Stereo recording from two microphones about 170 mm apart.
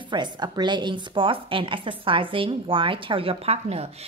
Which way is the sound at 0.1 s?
25° right (ahead or behind).